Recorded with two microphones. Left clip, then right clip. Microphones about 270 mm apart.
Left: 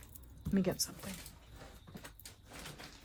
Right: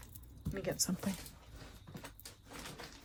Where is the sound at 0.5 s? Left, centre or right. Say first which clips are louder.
Left 4 dB; left.